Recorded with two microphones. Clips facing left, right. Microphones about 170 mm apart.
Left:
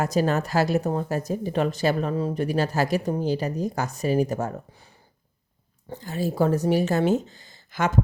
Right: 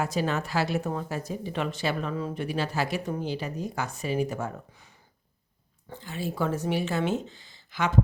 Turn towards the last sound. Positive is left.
turn(degrees=45)  # may be behind; listen again after turning